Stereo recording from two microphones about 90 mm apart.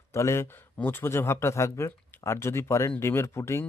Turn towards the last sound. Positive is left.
turn(degrees=30)  # may be behind; listen again after turning